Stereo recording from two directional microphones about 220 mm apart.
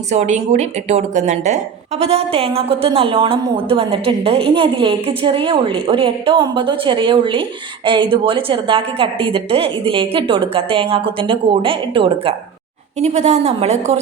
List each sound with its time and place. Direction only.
0.1 s a woman's voice: 30° right (ahead or behind)